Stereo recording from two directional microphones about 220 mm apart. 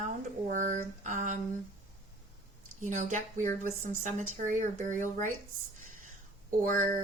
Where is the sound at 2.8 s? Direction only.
35° right (ahead or behind).